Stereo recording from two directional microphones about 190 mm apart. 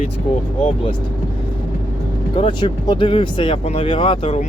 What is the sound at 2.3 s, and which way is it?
Speech, 25° left (ahead or behind).